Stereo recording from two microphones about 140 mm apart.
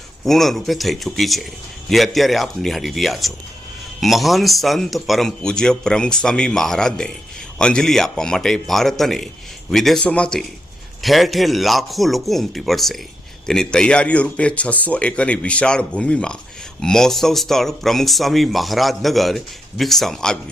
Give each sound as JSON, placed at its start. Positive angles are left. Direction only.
{"t": 0.3, "sound": "speech", "side_deg": 0}